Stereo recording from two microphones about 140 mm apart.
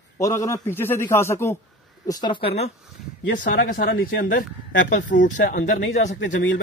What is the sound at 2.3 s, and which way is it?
Speech, 45° left (ahead or behind).